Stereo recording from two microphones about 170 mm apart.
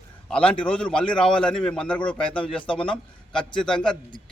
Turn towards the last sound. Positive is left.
turn(degrees=5)  # may be behind; listen again after turning